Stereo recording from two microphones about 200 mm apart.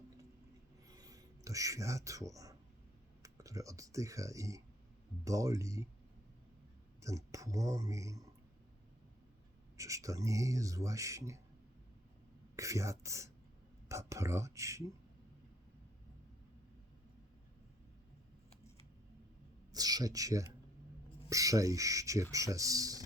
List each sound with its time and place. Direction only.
0.9 s a sound: 15° right (ahead or behind)
3.2 s speech: 15° right (ahead or behind)
7.0 s speech: 15° right (ahead or behind)
9.7 s speech: 15° right (ahead or behind)
12.5 s speech: 15° right (ahead or behind)
19.7 s speech: 20° right (ahead or behind)